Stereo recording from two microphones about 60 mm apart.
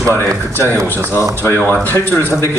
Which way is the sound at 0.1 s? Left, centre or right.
Left.